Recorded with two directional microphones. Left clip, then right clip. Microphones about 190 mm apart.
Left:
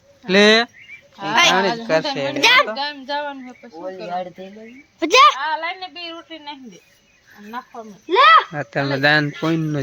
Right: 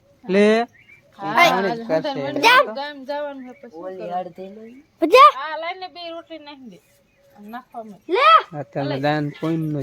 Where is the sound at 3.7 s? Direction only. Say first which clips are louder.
Left 2 dB; 15° right (ahead or behind).